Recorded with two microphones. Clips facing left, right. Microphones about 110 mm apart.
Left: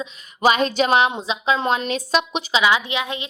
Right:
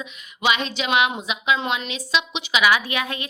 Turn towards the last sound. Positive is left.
turn(degrees=20)  # may be behind; listen again after turning